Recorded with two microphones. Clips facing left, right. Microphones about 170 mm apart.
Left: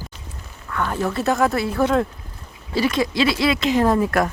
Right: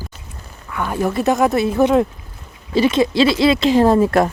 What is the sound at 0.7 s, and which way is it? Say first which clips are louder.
Speech: right 3 dB; 10° right (ahead or behind).